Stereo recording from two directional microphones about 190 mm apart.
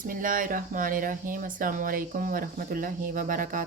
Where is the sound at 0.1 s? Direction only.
45° right (ahead or behind).